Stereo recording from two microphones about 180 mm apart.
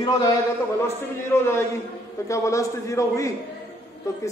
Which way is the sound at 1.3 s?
15° left (ahead or behind).